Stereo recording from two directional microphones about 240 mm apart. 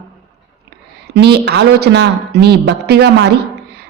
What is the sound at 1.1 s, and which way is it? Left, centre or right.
A woman's voice, right.